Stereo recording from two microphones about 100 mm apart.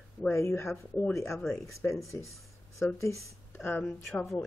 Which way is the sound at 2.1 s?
30° left (ahead or behind).